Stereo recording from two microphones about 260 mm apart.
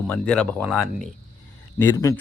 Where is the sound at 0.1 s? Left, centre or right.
Centre.